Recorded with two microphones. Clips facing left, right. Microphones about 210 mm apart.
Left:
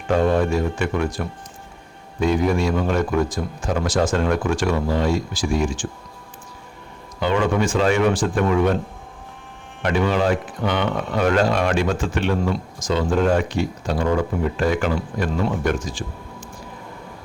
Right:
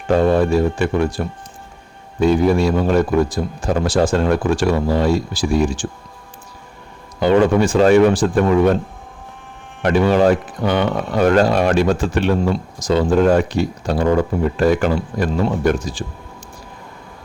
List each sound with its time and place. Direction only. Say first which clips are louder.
0.1 s speech: right 4 dB; 35° right (ahead or behind)
7.2 s speech: right 6 dB; 35° right (ahead or behind)
9.8 s speech: right 6 dB; 40° right (ahead or behind)